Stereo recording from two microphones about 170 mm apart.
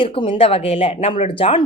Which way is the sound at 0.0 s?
30° left (ahead or behind).